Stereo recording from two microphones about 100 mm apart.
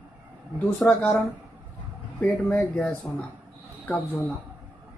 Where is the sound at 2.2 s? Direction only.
15° left (ahead or behind).